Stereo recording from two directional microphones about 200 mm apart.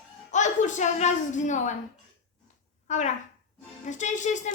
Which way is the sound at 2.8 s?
35° left (ahead or behind).